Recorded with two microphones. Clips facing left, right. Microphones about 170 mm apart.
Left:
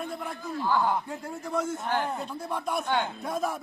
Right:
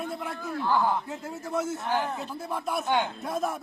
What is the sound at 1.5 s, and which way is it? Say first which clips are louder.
A man's voice: even; 5° right (ahead or behind).